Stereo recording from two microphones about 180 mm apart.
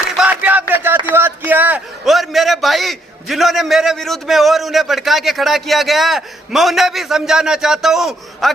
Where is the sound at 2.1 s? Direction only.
Centre (ahead or behind).